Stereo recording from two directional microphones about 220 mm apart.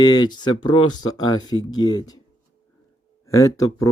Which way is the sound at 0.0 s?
20° left (ahead or behind).